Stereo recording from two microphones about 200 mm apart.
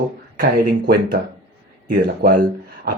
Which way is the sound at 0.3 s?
50° right (ahead or behind).